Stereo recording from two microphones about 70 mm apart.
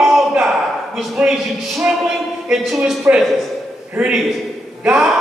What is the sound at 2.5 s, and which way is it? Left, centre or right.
Speech, centre.